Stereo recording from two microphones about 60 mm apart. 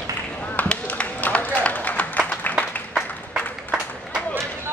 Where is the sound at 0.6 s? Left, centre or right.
Left.